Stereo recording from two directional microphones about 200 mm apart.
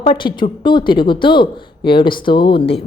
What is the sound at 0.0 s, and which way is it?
Speech, 25° left (ahead or behind).